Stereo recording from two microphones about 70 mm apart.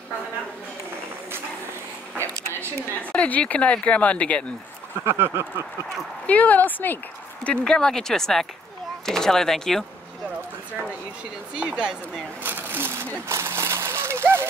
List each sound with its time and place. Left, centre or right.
3.0 s speech: centre
5.0 s speech: right
6.2 s speech: left
7.4 s speech: centre
11.5 s speech: centre
12.4 s speech: right
13.1 s a sound: right